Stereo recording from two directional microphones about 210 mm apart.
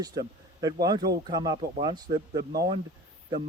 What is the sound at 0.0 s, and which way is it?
A man's voice, 20° right (ahead or behind).